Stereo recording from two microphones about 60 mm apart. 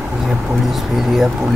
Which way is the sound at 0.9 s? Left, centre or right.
Centre.